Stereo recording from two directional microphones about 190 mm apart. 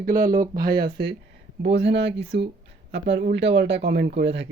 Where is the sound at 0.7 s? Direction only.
60° right (ahead or behind).